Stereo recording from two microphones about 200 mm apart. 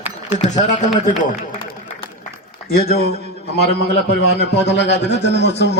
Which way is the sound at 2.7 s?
50° left (ahead or behind).